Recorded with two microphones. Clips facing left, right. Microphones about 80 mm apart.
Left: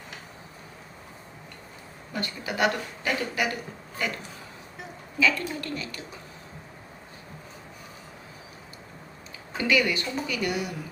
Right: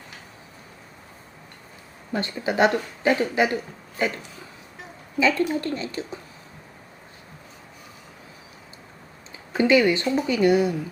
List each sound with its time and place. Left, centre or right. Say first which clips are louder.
2.1 s speech: right 7 dB; right
5.2 s speech: right 5 dB; right
9.5 s speech: right 7 dB; right